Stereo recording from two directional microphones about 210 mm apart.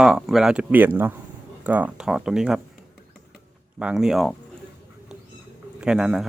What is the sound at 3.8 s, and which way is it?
Speech, centre (ahead or behind).